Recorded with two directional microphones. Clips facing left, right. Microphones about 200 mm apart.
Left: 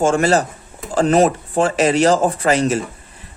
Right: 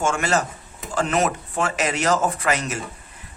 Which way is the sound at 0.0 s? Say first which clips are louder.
Left 7 dB; 35° left (ahead or behind).